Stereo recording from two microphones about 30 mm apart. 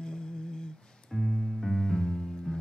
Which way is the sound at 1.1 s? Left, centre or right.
Centre.